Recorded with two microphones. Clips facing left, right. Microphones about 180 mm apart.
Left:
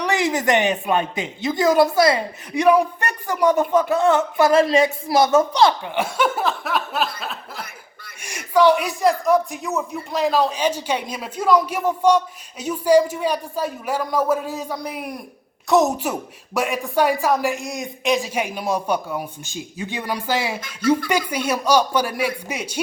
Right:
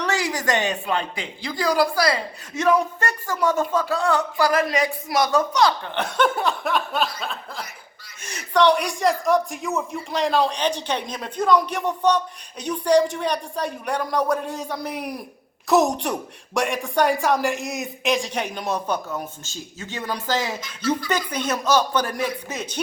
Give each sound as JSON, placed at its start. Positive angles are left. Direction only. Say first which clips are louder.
{"t": 0.0, "sound": "speech", "louder": "left 4 dB", "side_deg": 20}
{"t": 5.8, "sound": "speech", "louder": "left 1 dB", "side_deg": 10}